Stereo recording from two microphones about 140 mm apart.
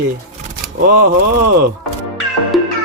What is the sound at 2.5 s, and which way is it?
Music, centre (ahead or behind).